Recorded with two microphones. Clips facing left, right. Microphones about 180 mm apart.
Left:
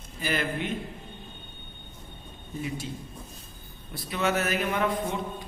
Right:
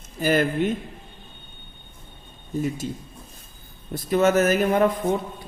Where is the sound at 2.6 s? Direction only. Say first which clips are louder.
Right 7 dB; 45° right (ahead or behind).